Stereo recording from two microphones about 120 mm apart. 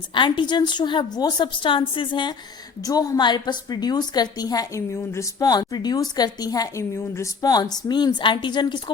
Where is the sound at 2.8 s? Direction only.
30° left (ahead or behind).